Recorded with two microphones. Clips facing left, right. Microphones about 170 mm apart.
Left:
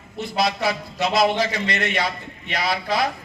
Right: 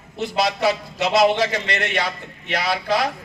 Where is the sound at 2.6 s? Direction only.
75° right (ahead or behind).